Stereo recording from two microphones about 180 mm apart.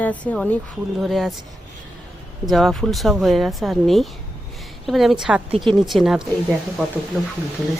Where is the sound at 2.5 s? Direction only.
Centre (ahead or behind).